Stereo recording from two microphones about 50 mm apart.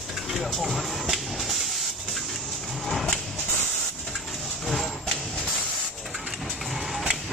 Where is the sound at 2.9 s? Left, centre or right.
Centre.